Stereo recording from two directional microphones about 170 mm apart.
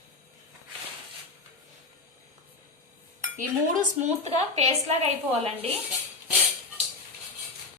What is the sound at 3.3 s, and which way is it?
Speech, 45° right (ahead or behind).